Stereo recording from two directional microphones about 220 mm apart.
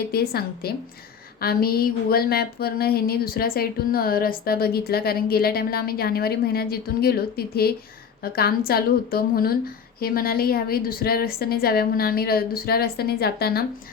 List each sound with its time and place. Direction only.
0.1 s speech: 45° left (ahead or behind)